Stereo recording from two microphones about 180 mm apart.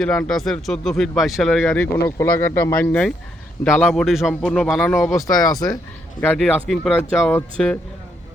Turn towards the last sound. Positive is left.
turn(degrees=10)  # may be behind; listen again after turning